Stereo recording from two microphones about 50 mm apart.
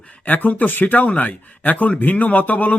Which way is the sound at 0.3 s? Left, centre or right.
Left.